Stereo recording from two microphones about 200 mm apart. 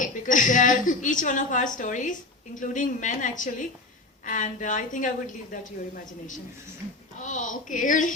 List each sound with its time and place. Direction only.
0.0 s a woman's voice: 40° left (ahead or behind)
7.2 s a woman's voice: 40° left (ahead or behind)